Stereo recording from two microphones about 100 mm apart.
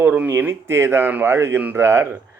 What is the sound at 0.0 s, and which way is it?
A man's voice, 15° right (ahead or behind).